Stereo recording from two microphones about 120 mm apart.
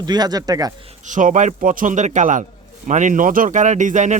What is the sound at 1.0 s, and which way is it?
Speech, 90° right.